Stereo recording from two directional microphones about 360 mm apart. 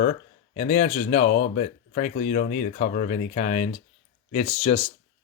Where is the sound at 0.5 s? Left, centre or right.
Left.